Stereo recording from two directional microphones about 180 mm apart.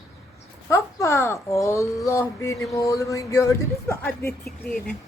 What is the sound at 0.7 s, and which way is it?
Speech, 15° left (ahead or behind).